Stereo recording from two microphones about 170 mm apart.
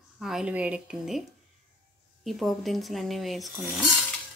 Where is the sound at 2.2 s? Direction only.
Centre (ahead or behind).